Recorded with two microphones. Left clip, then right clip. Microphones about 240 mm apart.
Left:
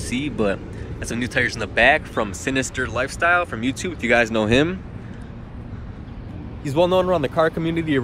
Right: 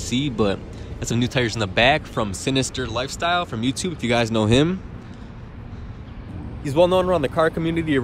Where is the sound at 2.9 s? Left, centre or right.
Centre.